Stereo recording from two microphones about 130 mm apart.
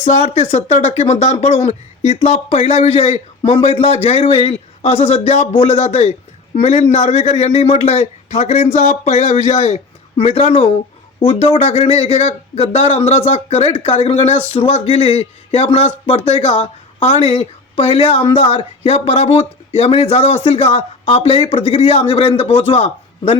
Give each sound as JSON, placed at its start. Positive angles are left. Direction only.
{"t": 0.0, "sound": "a man's voice", "side_deg": 55}